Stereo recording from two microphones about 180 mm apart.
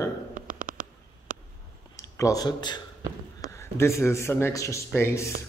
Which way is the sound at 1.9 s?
15° left (ahead or behind).